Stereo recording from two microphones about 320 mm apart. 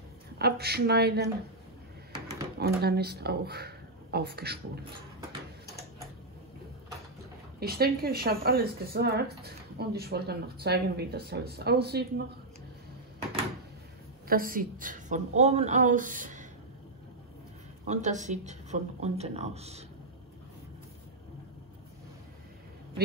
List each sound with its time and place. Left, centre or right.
0.4 s a woman's voice: right
2.6 s speech: right
7.6 s speech: right
14.2 s speech: right
17.8 s speech: right